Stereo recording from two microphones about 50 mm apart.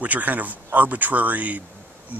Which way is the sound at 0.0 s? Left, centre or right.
Right.